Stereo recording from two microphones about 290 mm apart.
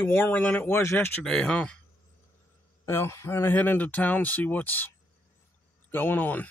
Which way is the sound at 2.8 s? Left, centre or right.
Centre.